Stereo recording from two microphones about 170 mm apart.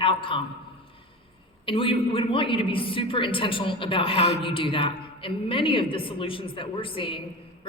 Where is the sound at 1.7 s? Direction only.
30° left (ahead or behind).